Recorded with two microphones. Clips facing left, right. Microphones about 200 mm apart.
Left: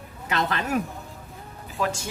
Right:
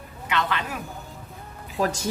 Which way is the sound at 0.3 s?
40° left (ahead or behind).